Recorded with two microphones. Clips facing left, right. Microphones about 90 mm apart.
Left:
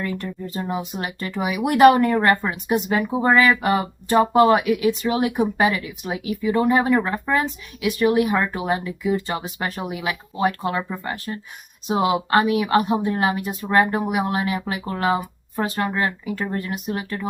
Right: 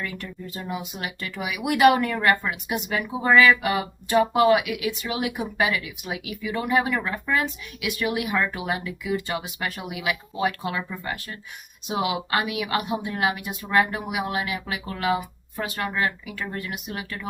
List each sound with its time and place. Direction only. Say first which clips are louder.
0.0 s speech: left 6 dB; 35° left (ahead or behind)